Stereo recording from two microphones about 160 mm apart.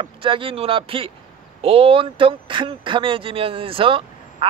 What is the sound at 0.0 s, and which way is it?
Speech, 35° right (ahead or behind).